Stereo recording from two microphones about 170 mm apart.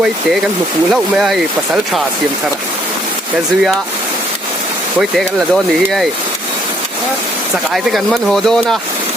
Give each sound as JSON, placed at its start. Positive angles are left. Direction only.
{"t": 0.9, "sound": "speech", "side_deg": 0}
{"t": 7.7, "sound": "speech", "side_deg": 0}